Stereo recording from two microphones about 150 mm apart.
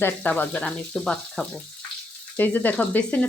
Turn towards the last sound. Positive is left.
turn(degrees=10)  # may be behind; listen again after turning